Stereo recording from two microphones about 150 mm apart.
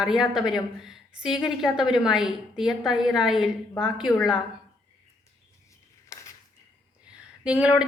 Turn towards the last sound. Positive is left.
turn(degrees=-10)  # may be behind; listen again after turning